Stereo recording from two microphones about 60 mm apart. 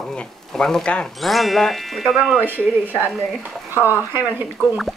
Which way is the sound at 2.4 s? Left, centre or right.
Right.